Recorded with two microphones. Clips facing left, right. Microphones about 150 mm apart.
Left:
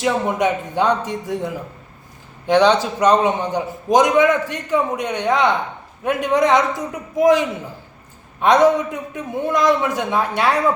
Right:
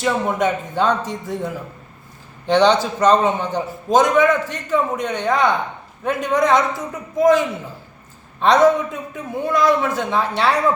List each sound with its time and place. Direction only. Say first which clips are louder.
0.0 s a man's voice: left 1 dB; 15° left (ahead or behind)
2.5 s a man's voice: even; 10° left (ahead or behind)